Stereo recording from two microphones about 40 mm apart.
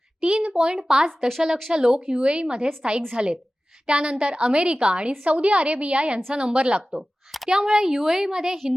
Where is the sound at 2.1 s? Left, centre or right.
Right.